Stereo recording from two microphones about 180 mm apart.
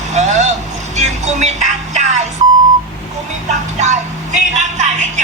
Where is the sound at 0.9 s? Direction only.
40° right (ahead or behind).